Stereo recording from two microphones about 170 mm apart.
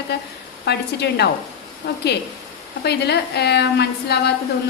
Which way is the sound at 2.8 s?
75° left (ahead or behind).